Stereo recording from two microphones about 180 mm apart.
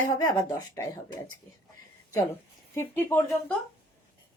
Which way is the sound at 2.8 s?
10° left (ahead or behind).